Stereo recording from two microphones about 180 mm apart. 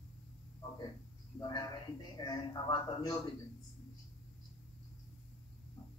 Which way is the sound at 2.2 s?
20° left (ahead or behind).